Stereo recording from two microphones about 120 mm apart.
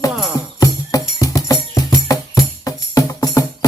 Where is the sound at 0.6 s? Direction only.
30° left (ahead or behind).